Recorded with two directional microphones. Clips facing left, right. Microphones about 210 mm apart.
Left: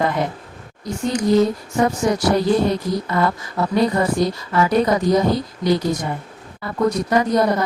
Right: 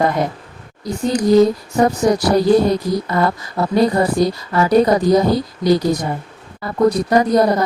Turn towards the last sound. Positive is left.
turn(degrees=-35)  # may be behind; listen again after turning